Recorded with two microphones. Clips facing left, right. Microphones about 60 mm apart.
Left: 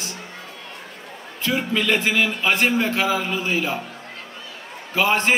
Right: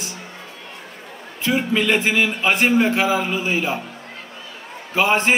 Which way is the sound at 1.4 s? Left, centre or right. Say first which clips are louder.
Right 2 dB; right.